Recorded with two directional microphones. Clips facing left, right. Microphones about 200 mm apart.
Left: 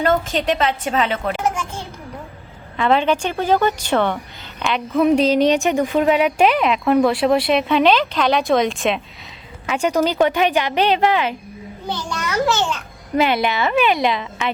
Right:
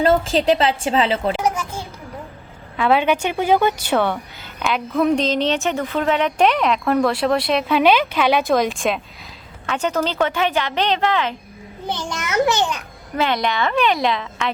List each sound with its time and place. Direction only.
0.0 s a woman's voice: 30° right (ahead or behind)
2.7 s a woman's voice: 5° right (ahead or behind)
9.6 s a woman's voice: 10° left (ahead or behind)
11.9 s a woman's voice: 20° right (ahead or behind)
13.1 s speech: 10° left (ahead or behind)